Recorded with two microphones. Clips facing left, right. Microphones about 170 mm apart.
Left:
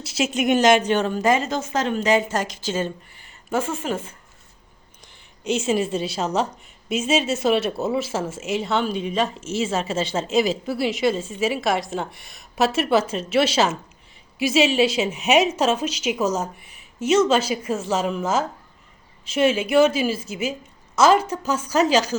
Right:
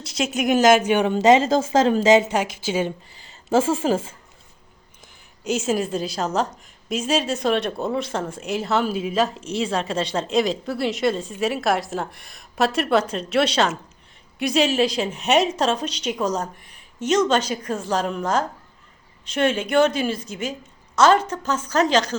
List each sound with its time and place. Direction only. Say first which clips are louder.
0.0 s a woman's voice: left 1 dB; 5° left (ahead or behind); by 1.1 s 10° right (ahead or behind)
1.1 s speech: right 5 dB; 25° right (ahead or behind)
1.5 s a woman's voice: right 6 dB; 90° right
2.3 s a woman's voice: right 2 dB; 10° right (ahead or behind)
3.2 s a sound: right 5 dB; 30° right (ahead or behind)
5.4 s a woman's voice: left 1 dB; centre (ahead or behind)